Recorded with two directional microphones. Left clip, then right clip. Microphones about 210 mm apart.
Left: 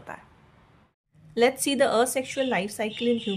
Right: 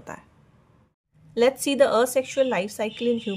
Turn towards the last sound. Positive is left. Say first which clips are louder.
# right 1 dB
turn(degrees=-30)  # may be behind; listen again after turning